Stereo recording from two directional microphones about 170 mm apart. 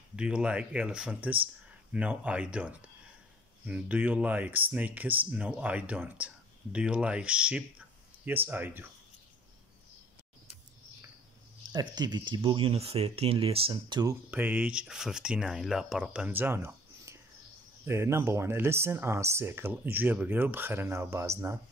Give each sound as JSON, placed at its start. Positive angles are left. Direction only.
{"t": 0.1, "sound": "speech", "side_deg": -5}
{"t": 11.7, "sound": "speech", "side_deg": -25}
{"t": 14.3, "sound": "speech", "side_deg": -10}